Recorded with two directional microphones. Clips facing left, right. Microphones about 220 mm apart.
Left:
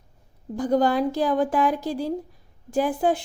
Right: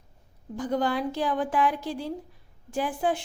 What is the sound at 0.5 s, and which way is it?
Speech, 40° left (ahead or behind).